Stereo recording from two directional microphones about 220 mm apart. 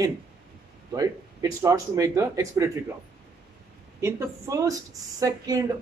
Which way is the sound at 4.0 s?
15° right (ahead or behind).